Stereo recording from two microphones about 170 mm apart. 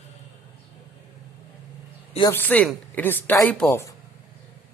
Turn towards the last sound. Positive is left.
turn(degrees=15)  # may be behind; listen again after turning